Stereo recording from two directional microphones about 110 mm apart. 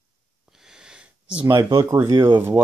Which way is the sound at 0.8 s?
10° right (ahead or behind).